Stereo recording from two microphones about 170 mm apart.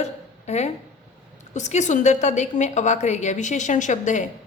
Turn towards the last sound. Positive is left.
turn(degrees=45)  # may be behind; listen again after turning